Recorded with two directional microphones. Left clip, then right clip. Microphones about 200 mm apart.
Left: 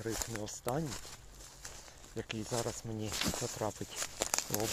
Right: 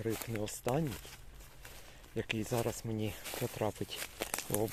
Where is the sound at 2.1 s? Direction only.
35° right (ahead or behind).